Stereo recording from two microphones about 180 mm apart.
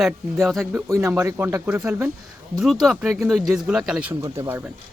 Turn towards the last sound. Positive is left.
turn(degrees=-10)  # may be behind; listen again after turning